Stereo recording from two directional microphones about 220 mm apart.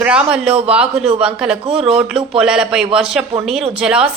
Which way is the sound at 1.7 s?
25° right (ahead or behind).